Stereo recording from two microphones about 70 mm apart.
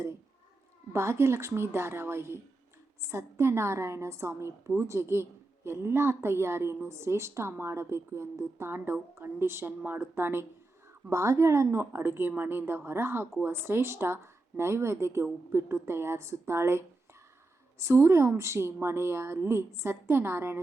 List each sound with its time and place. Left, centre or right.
0.9 s a woman's voice: right